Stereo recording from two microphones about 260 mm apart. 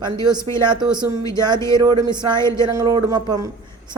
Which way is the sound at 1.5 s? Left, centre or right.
Centre.